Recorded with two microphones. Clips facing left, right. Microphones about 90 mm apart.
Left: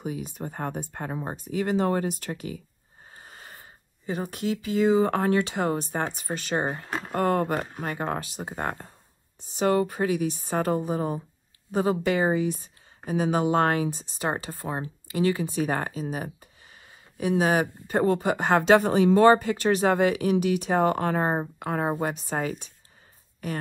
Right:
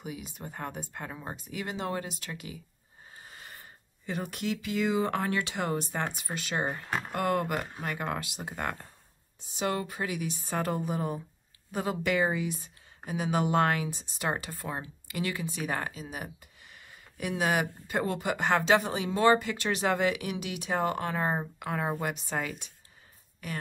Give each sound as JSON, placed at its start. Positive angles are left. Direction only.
{"t": 0.0, "sound": "a woman's voice", "side_deg": 45}
{"t": 3.1, "sound": "a sound", "side_deg": 35}
{"t": 4.3, "sound": "a woman's voice", "side_deg": 25}
{"t": 9.4, "sound": "a woman's voice", "side_deg": 45}
{"t": 10.9, "sound": "a woman's voice", "side_deg": 30}
{"t": 15.4, "sound": "speech", "side_deg": 45}
{"t": 18.6, "sound": "a woman's voice", "side_deg": 50}
{"t": 21.3, "sound": "a woman's voice", "side_deg": 35}